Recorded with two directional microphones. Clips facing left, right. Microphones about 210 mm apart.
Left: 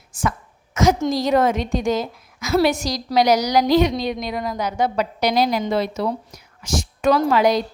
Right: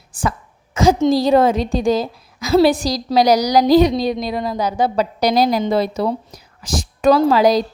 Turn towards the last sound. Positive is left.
turn(degrees=-35)  # may be behind; listen again after turning